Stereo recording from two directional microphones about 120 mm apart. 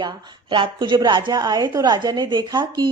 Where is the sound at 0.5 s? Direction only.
45° right (ahead or behind).